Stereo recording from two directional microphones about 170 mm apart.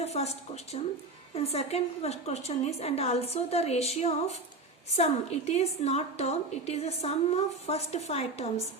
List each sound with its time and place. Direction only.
0.0 s a woman's voice: 40° left (ahead or behind)